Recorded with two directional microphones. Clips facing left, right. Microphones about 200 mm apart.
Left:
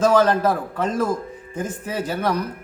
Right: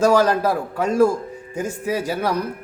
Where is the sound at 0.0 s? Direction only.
10° right (ahead or behind).